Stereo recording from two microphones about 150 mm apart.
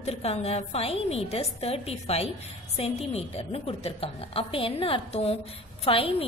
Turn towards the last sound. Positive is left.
turn(degrees=40)  # may be behind; listen again after turning